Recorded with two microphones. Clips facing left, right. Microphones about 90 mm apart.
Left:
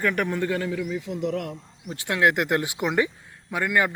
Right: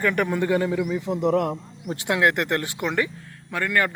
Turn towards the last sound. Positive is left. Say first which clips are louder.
# even
turn(degrees=10)  # may be behind; listen again after turning